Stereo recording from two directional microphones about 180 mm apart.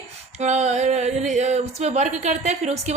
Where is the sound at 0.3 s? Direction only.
40° right (ahead or behind).